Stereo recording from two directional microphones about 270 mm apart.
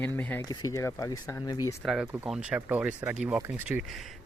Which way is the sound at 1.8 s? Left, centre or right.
Centre.